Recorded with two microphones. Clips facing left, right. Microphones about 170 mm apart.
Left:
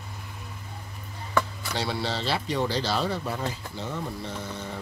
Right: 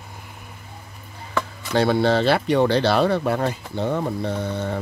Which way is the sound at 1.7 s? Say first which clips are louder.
Right 11 dB; 55° right (ahead or behind).